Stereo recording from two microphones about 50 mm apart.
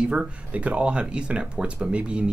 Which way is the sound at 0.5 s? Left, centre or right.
Right.